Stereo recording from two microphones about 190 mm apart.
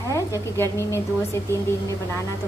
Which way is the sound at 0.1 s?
15° left (ahead or behind).